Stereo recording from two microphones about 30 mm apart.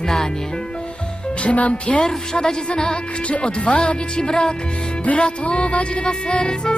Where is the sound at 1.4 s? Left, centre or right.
Left.